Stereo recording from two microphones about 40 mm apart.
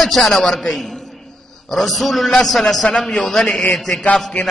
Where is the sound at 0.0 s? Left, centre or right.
Centre.